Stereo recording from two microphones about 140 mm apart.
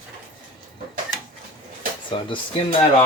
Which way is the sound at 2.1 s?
40° left (ahead or behind).